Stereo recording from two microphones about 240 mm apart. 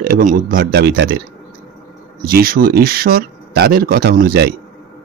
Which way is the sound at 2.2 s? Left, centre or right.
Right.